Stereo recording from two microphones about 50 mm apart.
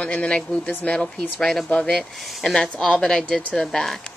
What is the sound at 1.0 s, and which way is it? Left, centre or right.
Speech, centre.